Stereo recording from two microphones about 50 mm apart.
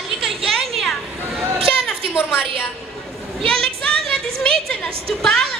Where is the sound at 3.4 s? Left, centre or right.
Left.